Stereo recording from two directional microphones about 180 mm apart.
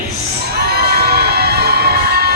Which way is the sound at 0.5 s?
60° right (ahead or behind).